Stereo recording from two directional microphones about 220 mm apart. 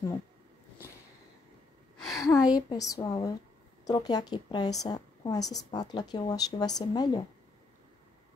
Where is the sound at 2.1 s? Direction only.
15° left (ahead or behind).